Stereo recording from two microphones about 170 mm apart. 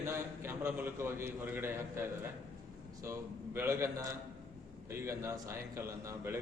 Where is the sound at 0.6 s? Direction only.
10° right (ahead or behind).